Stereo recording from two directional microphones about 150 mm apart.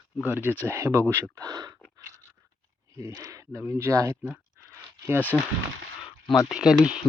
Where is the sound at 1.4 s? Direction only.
25° right (ahead or behind).